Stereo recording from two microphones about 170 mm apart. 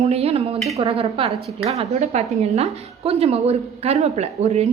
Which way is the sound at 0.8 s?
30° right (ahead or behind).